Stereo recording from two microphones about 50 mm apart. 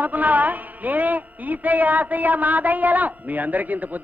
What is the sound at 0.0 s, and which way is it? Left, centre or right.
A man's voice, right.